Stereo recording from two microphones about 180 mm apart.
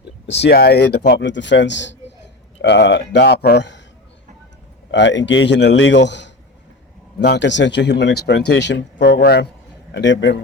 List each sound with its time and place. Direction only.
0.3 s speech: 70° left (ahead or behind)
4.9 s a man's voice: 90° left; by 9.5 s 60° left (ahead or behind)
9.9 s a man's voice: 90° left